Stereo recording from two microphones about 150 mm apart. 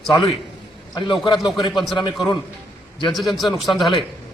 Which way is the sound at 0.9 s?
30° left (ahead or behind).